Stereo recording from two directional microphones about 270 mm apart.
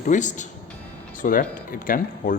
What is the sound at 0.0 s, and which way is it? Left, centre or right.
Speech, left.